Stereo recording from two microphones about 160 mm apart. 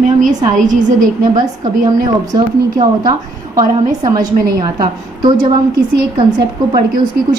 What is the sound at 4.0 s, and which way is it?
A woman's voice, 25° right (ahead or behind).